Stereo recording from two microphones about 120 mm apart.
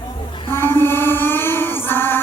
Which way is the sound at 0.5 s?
20° left (ahead or behind).